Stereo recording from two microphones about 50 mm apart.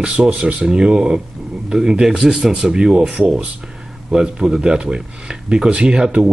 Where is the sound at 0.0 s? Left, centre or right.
Right.